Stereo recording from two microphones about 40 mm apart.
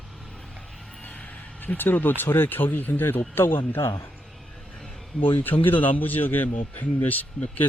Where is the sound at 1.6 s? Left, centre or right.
Left.